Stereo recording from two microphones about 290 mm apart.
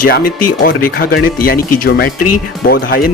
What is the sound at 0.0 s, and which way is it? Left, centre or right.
A man's voice, left.